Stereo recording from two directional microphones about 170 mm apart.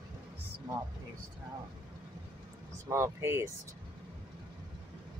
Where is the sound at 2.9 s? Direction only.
15° right (ahead or behind).